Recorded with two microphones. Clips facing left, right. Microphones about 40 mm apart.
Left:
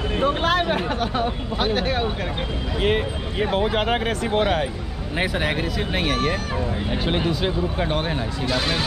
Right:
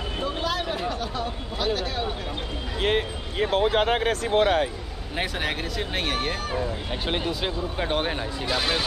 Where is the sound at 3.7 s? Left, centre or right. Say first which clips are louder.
Even; left.